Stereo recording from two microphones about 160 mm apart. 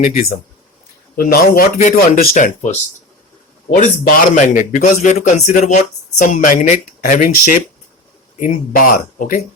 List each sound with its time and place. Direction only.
0.0 s a man's voice: 65° left (ahead or behind)